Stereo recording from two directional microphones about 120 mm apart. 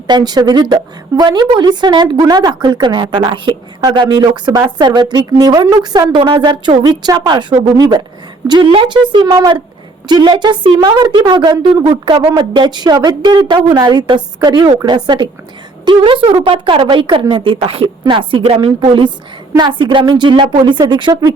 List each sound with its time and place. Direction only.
0.1 s a woman's voice: 35° right (ahead or behind)